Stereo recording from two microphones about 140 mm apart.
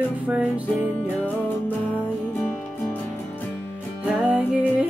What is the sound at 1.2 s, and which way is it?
Music, 10° left (ahead or behind).